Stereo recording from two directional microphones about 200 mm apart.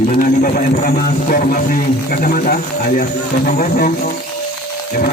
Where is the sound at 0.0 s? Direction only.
40° left (ahead or behind).